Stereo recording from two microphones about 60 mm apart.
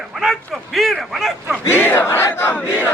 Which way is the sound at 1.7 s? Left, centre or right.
Left.